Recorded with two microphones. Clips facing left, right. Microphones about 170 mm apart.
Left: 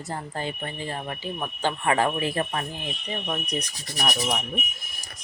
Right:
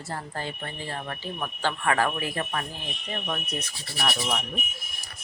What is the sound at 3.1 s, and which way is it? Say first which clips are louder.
Speech: left 2 dB; 15° left (ahead or behind).